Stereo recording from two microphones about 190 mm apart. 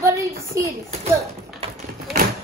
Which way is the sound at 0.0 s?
15° right (ahead or behind).